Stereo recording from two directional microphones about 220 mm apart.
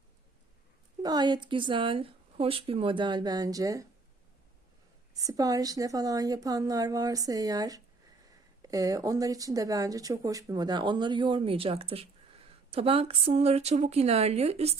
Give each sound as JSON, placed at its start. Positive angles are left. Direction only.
{"t": 1.0, "sound": "speech", "side_deg": -20}
{"t": 5.1, "sound": "speech", "side_deg": -15}